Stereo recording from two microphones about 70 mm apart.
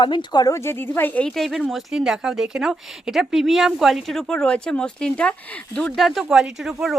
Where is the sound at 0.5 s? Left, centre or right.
Left.